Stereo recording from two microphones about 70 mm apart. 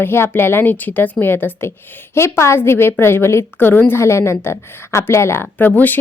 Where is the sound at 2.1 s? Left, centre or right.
Left.